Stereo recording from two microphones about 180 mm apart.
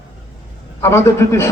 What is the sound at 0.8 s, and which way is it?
Speech, 15° left (ahead or behind).